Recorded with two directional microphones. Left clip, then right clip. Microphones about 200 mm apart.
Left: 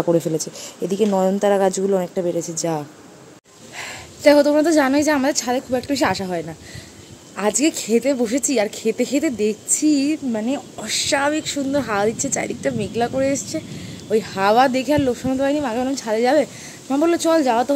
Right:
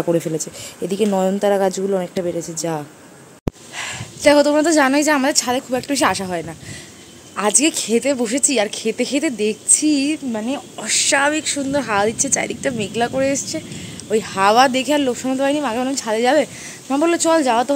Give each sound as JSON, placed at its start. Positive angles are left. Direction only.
{"t": 0.2, "sound": "speech", "side_deg": 5}